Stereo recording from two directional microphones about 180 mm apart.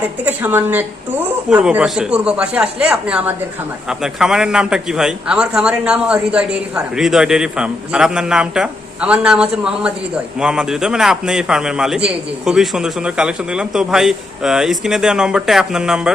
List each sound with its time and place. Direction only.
0.3 s a man's voice: 10° right (ahead or behind)